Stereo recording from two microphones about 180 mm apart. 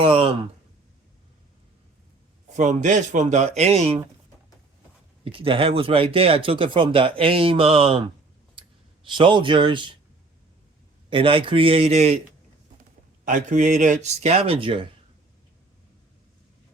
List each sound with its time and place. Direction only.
0.0 s speech: 35° right (ahead or behind)
2.5 s speech: 40° right (ahead or behind)
5.2 s speech: 30° right (ahead or behind)
8.6 s clicking: 30° right (ahead or behind)
9.0 s speech: 25° right (ahead or behind)
11.1 s speech: 30° right (ahead or behind)
13.2 s speech: 45° right (ahead or behind); by 14.8 s 30° right (ahead or behind)